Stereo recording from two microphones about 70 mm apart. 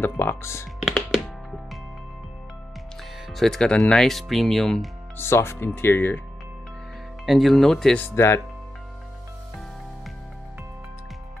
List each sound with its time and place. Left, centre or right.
0.0 s speech: left
0.9 s music: centre
3.3 s speech: centre
5.1 s speech: left
7.2 s speech: centre
8.1 s speech: left